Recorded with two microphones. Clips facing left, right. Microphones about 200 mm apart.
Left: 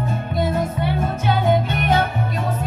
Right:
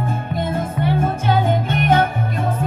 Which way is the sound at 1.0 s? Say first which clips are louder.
Left 1 dB; 50° right (ahead or behind).